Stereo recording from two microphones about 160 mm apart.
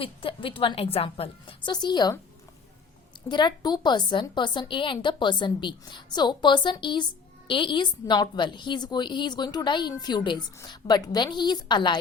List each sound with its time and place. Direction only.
0.0 s a woman's voice: 35° left (ahead or behind)
3.2 s a woman's voice: 30° left (ahead or behind)